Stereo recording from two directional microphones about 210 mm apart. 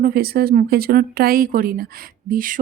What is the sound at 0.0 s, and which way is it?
Speech, 45° right (ahead or behind).